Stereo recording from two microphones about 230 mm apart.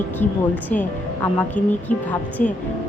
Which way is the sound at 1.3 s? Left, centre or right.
Centre.